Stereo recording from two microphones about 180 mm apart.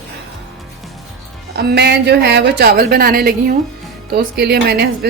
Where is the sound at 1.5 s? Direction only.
65° right (ahead or behind).